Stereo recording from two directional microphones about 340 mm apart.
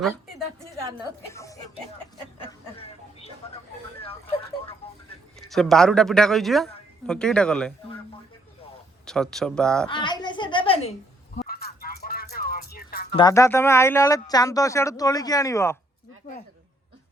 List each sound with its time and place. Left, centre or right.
0.0 s a woman's voice: centre
2.4 s a sound: centre
5.4 s a man's voice: centre
9.0 s a man's voice: centre
9.9 s a sound: centre
11.3 s music: left
13.1 s speech: centre